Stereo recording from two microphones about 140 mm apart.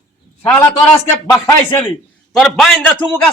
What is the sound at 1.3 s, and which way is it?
Speech, 20° left (ahead or behind).